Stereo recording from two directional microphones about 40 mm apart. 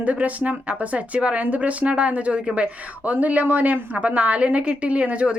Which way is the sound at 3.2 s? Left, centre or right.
Right.